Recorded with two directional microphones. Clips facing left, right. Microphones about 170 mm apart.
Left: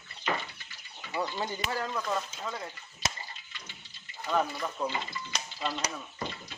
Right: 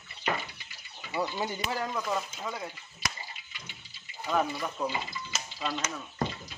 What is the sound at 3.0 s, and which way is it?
Water, 25° left (ahead or behind).